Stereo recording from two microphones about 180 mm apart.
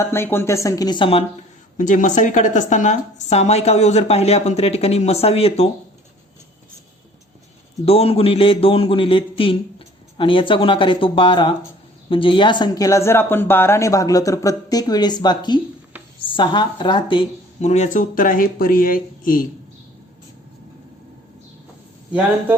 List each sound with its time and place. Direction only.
0.0 s speech: 15° left (ahead or behind)
1.8 s a woman's voice: 45° left (ahead or behind)
7.9 s a man's voice: 30° left (ahead or behind); by 19.5 s 50° left (ahead or behind)